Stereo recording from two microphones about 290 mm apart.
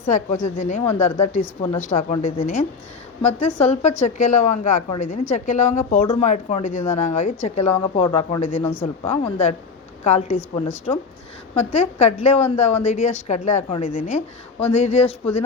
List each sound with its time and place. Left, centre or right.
0.0 s a woman's voice: left